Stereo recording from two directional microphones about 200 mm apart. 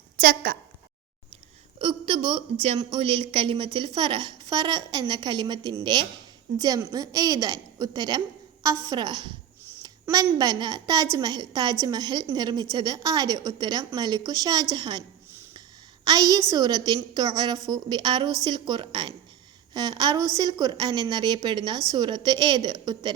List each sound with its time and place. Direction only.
0.2 s speech: 45° right (ahead or behind)
1.8 s a woman's voice: 25° right (ahead or behind)
16.0 s a woman's voice: 20° right (ahead or behind)